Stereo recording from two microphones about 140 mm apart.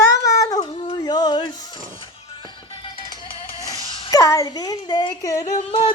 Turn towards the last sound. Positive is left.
turn(degrees=35)  # may be behind; listen again after turning